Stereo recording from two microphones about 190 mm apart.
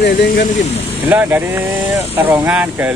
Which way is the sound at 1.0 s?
10° right (ahead or behind).